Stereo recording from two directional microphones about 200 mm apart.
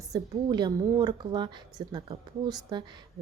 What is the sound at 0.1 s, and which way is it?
A woman's voice, 20° right (ahead or behind).